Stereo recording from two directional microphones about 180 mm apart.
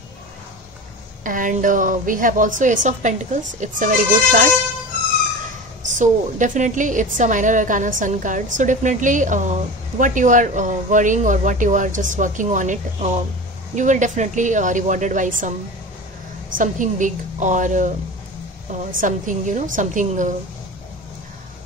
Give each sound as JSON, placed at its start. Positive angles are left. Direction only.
{"t": 1.2, "sound": "a woman's voice", "side_deg": -50}
{"t": 5.9, "sound": "a woman's voice", "side_deg": -45}
{"t": 16.5, "sound": "a woman's voice", "side_deg": -45}